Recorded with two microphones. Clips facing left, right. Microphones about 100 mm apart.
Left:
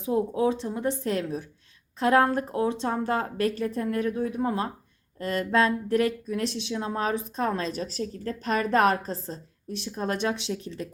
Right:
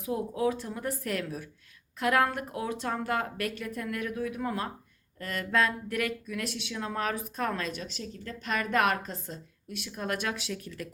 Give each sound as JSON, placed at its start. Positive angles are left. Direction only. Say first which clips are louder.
{"t": 0.0, "sound": "speech", "louder": "left 5 dB", "side_deg": 25}